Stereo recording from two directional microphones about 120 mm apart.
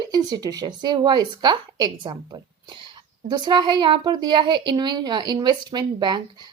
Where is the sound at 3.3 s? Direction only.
35° right (ahead or behind).